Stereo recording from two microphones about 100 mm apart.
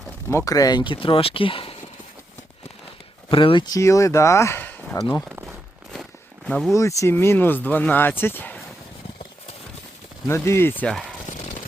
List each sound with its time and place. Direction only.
0.3 s speech: 30° left (ahead or behind)
0.9 s speech: 65° left (ahead or behind)
3.2 s speech: 55° left (ahead or behind)
3.7 s speech: 30° left (ahead or behind)
4.9 s speech: 35° left (ahead or behind)
5.9 s walk: 5° left (ahead or behind)
6.7 s speech: 30° left (ahead or behind)
10.2 s speech: 25° left (ahead or behind)
10.8 s speech: centre (ahead or behind)